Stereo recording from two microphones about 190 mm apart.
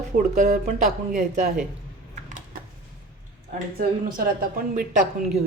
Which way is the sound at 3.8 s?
50° right (ahead or behind).